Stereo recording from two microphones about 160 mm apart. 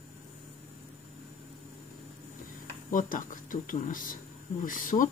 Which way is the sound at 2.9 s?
55° left (ahead or behind).